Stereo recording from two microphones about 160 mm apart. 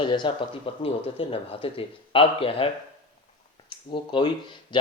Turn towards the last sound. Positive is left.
turn(degrees=30)  # may be behind; listen again after turning